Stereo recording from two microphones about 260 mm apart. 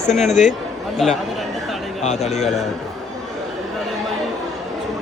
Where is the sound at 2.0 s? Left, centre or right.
Left.